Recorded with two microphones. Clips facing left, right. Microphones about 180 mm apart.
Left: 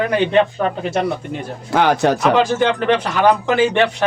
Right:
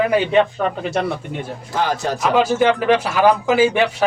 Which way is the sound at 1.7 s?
65° left (ahead or behind).